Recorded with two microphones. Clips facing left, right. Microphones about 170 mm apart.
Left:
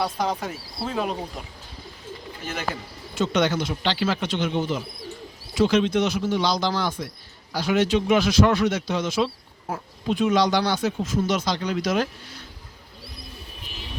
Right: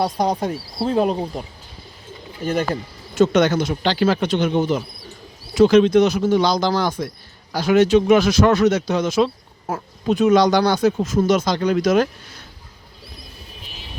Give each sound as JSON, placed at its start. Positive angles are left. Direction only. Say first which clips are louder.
{"t": 0.0, "sound": "speech", "louder": "right 6 dB", "side_deg": -35}
{"t": 3.2, "sound": "speech", "louder": "right 7 dB", "side_deg": -45}